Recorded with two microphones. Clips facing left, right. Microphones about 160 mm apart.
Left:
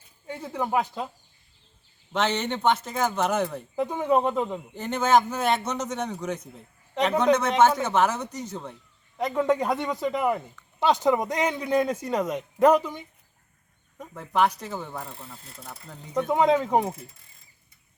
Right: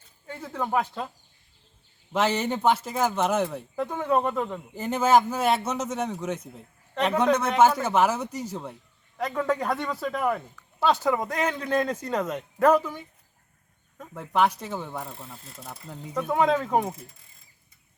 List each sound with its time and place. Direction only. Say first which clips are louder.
0.3 s a man's voice: left 1 dB; 10° left (ahead or behind)
2.1 s speech: right 1 dB; 5° right (ahead or behind)
3.8 s a man's voice: left 2 dB; 15° left (ahead or behind)
4.7 s speech: right 1 dB; 5° right (ahead or behind)
9.1 s a man's voice: left 3 dB; 15° left (ahead or behind)
14.1 s speech: even; centre (ahead or behind)
16.3 s a man's voice: left 1 dB; 15° left (ahead or behind)